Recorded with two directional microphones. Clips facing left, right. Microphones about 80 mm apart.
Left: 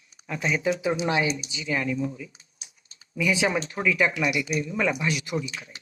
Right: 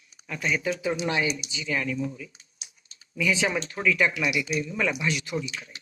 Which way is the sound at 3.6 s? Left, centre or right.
Centre.